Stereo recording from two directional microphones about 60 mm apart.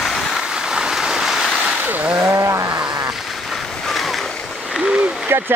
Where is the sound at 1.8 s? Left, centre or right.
Right.